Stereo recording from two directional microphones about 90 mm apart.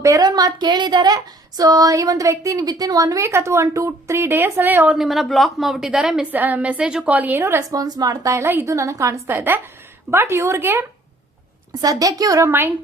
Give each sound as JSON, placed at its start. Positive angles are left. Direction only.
{"t": 0.0, "sound": "speech", "side_deg": -45}
{"t": 4.9, "sound": "a woman's voice", "side_deg": 0}
{"t": 6.3, "sound": "a woman's voice", "side_deg": -20}
{"t": 7.7, "sound": "speech", "side_deg": -45}
{"t": 11.8, "sound": "speech", "side_deg": -45}
{"t": 12.5, "sound": "speech", "side_deg": -25}